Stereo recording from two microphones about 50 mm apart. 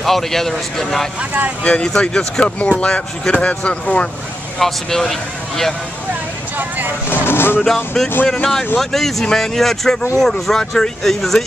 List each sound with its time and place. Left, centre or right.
0.0 s speech: centre
1.6 s speech: left
4.6 s speech: centre
7.2 s speech: left
7.6 s speech: centre